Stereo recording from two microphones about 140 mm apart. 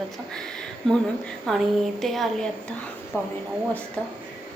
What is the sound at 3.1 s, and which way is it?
Speech, 15° left (ahead or behind).